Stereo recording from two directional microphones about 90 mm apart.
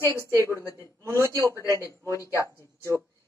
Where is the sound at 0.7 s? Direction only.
30° right (ahead or behind).